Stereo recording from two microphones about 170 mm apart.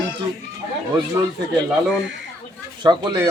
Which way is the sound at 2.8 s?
25° right (ahead or behind).